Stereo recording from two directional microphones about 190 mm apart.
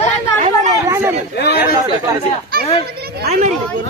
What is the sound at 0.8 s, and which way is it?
Speech, 15° right (ahead or behind).